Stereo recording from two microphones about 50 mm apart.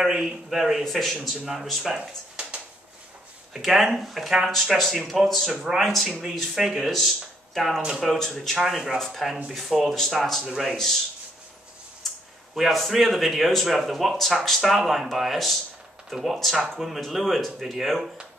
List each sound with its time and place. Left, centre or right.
0.0 s a man's voice: centre
0.8 s speech: centre
2.0 s a sound: right
3.5 s speech: centre
5.5 s a man's voice: centre
5.8 s a man's voice: centre
6.9 s speech: centre
10.4 s a man's voice: centre
12.0 s a sound: centre
12.5 s speech: centre
16.5 s speech: centre